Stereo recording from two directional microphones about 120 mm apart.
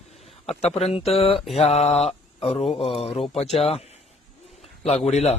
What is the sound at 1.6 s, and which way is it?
Mantra, 65° left (ahead or behind).